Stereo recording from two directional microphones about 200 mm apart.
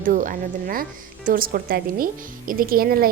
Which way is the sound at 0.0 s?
40° right (ahead or behind).